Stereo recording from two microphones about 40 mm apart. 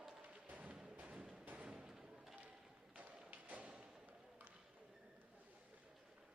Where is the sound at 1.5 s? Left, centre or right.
Right.